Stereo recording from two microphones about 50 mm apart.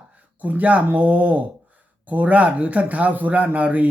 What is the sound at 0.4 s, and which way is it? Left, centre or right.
A man's voice, right.